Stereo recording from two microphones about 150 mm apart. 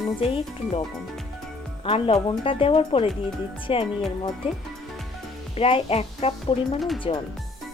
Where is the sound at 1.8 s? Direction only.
35° left (ahead or behind).